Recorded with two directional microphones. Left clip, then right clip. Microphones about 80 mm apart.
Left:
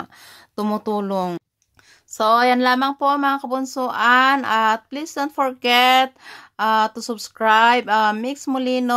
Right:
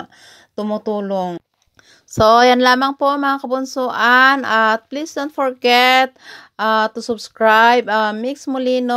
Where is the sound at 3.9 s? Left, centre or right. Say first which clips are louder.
Right 3 dB; right.